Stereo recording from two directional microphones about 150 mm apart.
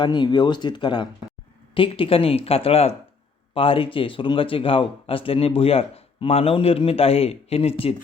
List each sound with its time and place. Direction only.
0.0 s speech: 30° left (ahead or behind)